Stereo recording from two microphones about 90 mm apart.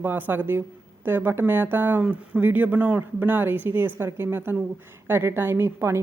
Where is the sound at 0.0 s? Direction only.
25° right (ahead or behind).